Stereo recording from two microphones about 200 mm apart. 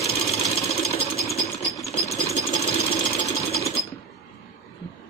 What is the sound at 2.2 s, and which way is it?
Sewing machine, 30° left (ahead or behind).